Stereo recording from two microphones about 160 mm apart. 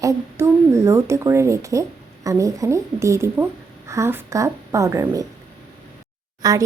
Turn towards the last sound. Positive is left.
turn(degrees=-20)  # may be behind; listen again after turning